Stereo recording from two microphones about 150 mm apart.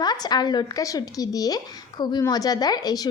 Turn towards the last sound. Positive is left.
turn(degrees=25)  # may be behind; listen again after turning